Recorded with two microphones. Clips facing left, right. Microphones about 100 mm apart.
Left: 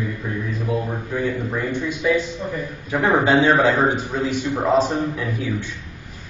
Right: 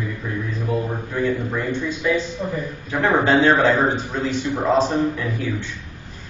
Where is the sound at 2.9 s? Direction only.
15° left (ahead or behind).